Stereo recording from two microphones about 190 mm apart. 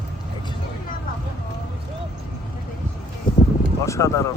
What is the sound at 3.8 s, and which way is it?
Speech, 15° left (ahead or behind).